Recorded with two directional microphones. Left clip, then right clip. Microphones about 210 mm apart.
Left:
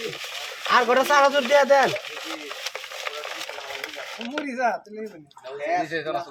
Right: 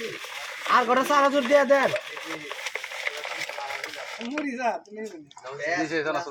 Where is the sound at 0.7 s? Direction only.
50° left (ahead or behind).